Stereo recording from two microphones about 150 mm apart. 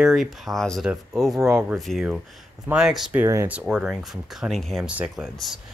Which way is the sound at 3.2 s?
15° right (ahead or behind).